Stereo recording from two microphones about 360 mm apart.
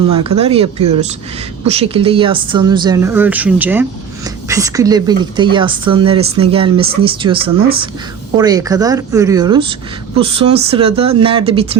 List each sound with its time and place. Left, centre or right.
0.1 s speech: centre
10.9 s speech: right
11.2 s speech: centre